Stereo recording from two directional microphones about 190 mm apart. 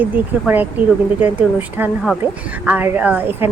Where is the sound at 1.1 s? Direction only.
10° right (ahead or behind).